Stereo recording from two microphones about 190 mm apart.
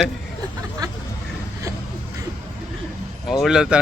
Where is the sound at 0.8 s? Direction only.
20° right (ahead or behind).